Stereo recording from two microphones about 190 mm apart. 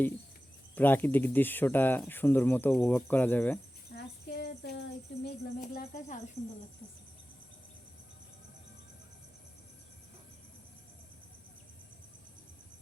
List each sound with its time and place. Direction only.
0.8 s speech: 10° left (ahead or behind)
3.9 s a sound: 60° left (ahead or behind)
5.2 s speech: 50° left (ahead or behind)